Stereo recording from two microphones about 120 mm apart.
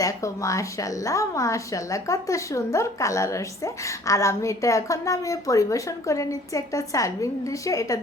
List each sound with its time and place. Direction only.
0.0 s a woman's voice: 25° left (ahead or behind)